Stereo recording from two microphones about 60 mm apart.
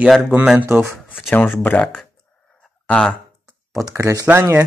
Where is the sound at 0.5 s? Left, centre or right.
Right.